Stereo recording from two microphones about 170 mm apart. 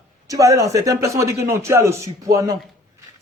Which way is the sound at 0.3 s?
20° right (ahead or behind).